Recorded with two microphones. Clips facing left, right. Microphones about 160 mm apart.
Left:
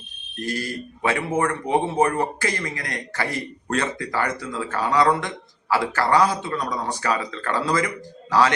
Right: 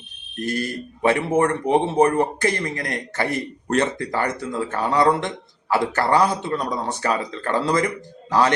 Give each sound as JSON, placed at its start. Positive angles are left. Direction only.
{"t": 0.4, "sound": "a man's voice", "side_deg": -25}